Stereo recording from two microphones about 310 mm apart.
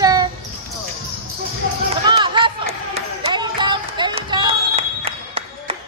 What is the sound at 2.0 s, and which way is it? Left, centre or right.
Run, centre.